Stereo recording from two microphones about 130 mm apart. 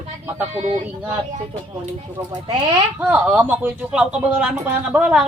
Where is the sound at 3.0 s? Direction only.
15° right (ahead or behind).